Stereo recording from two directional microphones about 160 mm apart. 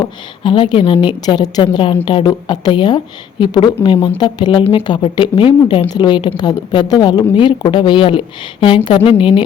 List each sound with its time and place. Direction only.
0.0 s a woman's voice: 30° left (ahead or behind)